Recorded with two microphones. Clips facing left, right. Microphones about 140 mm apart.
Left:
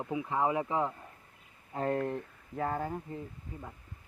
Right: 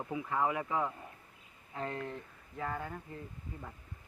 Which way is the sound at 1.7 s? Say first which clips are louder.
Left 8 dB; 45° left (ahead or behind).